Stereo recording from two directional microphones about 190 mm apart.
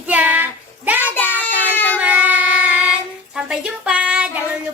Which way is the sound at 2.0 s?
10° right (ahead or behind).